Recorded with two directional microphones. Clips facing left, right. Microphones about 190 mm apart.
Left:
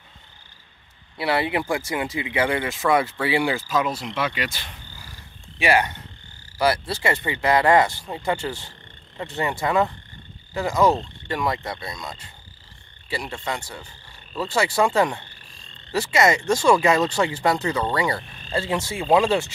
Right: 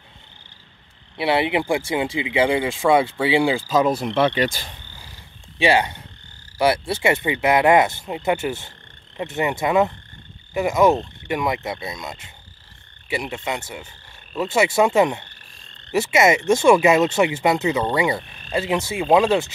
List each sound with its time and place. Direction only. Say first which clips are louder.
1.1 s speech: right 3 dB; 25° right (ahead or behind)
3.6 s frog: right 5 dB; 35° right (ahead or behind)
3.9 s speech: right 8 dB; 50° right (ahead or behind)
4.3 s frog: right 8 dB; 40° right (ahead or behind)
5.6 s speech: right 2 dB; 25° right (ahead or behind)
13.3 s speech: right 2 dB; 20° right (ahead or behind)
15.9 s speech: right 3 dB; 20° right (ahead or behind)